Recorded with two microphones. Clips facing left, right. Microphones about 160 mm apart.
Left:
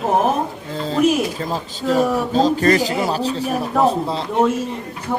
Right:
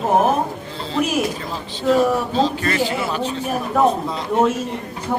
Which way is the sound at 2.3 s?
40° left (ahead or behind).